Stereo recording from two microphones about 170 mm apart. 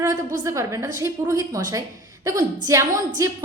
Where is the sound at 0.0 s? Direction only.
20° right (ahead or behind).